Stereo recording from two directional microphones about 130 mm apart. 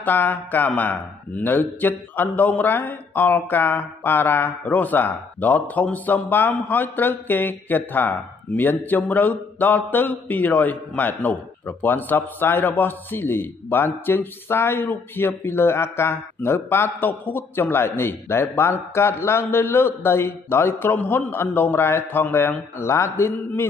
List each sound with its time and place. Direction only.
0.0 s speech: 15° left (ahead or behind)